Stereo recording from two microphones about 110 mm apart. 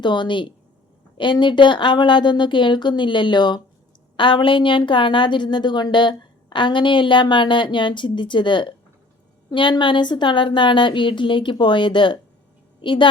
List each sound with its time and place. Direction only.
0.0 s a woman's voice: 45° left (ahead or behind)